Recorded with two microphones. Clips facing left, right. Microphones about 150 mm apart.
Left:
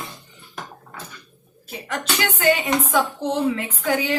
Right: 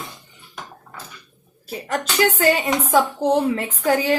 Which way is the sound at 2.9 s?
40° right (ahead or behind).